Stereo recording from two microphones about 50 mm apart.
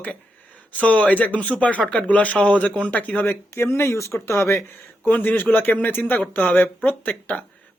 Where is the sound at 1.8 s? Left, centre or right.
Centre.